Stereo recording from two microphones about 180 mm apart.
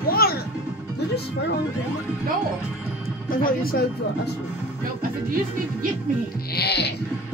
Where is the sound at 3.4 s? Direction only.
55° left (ahead or behind).